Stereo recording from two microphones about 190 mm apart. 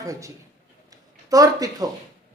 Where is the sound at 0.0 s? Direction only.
15° right (ahead or behind).